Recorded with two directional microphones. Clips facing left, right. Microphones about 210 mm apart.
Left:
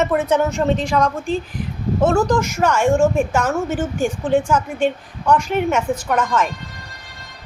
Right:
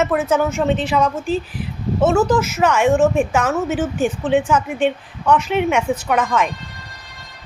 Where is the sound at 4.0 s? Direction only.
10° left (ahead or behind).